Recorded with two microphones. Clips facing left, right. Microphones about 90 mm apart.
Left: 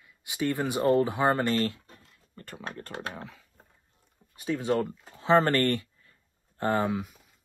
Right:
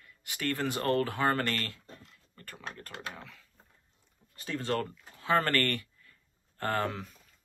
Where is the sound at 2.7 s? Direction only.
30° left (ahead or behind); by 7.1 s 15° left (ahead or behind).